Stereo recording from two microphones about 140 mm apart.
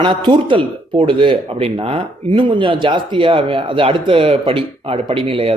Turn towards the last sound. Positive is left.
turn(degrees=-40)  # may be behind; listen again after turning